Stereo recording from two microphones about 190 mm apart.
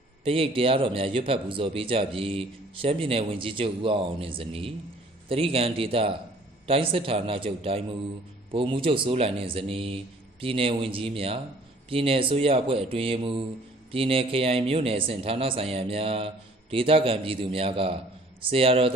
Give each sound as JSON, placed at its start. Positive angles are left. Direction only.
{"t": 0.3, "sound": "a man's voice", "side_deg": -30}